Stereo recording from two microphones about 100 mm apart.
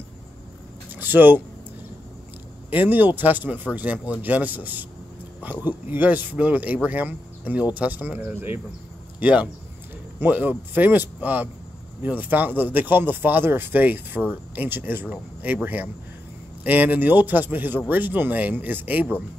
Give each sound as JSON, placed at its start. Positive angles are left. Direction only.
{"t": 0.9, "sound": "speech", "side_deg": -20}
{"t": 2.7, "sound": "speech", "side_deg": -20}